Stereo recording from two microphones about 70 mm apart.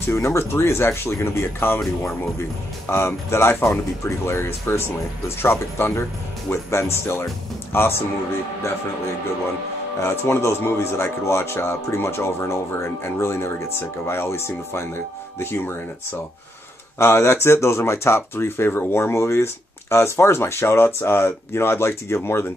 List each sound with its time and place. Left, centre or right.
0.1 s speech: left
2.9 s speech: left
10.0 s speech: left